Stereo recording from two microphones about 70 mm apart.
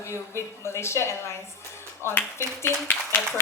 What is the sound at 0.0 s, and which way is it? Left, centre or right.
A woman's voice, left.